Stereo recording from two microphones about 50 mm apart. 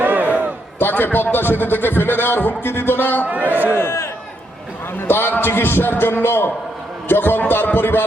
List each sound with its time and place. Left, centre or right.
0.0 s a sound: right
0.8 s a man's voice: left
3.2 s a man's voice: right
3.8 s a man's voice: left